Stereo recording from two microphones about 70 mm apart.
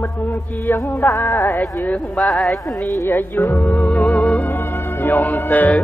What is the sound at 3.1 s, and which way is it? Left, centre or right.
Speech, left.